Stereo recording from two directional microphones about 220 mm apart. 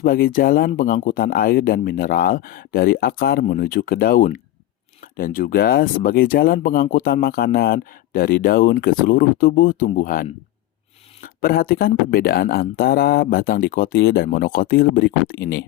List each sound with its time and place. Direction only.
0.0 s speech: 40° left (ahead or behind)
11.3 s speech: 40° left (ahead or behind)